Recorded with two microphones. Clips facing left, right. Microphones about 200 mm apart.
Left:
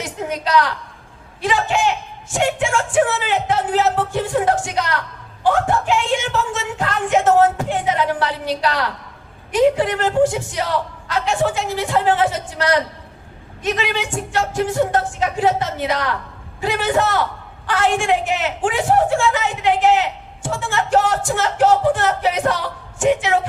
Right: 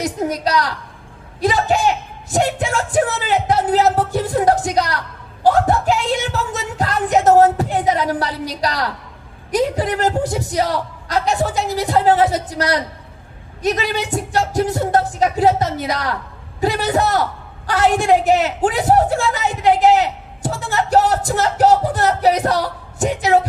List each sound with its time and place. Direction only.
0.0 s speech: 40° right (ahead or behind)